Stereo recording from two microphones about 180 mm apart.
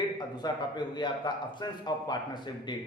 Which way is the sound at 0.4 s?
25° left (ahead or behind).